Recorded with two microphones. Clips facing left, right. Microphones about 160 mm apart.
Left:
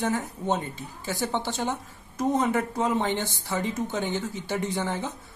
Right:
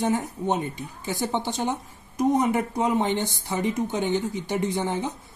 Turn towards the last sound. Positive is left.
turn(degrees=-15)  # may be behind; listen again after turning